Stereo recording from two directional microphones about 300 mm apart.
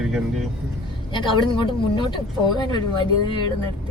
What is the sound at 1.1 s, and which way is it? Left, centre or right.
Speech, centre.